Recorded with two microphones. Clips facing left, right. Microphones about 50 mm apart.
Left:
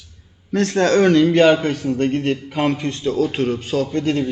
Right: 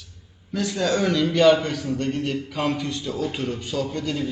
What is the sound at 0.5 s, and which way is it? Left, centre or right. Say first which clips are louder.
A man's voice: left 7 dB; left.